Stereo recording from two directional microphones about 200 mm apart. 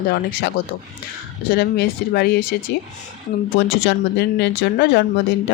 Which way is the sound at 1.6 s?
55° left (ahead or behind).